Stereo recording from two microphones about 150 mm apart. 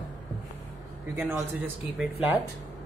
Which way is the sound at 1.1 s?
15° right (ahead or behind).